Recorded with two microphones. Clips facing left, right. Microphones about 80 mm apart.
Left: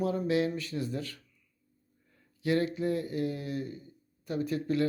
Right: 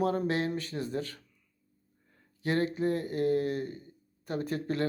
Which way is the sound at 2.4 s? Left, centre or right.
Right.